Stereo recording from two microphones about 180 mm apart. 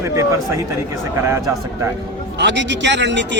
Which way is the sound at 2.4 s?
80° right.